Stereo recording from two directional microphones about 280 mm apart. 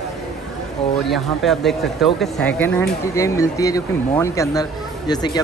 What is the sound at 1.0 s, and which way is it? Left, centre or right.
Speech, centre.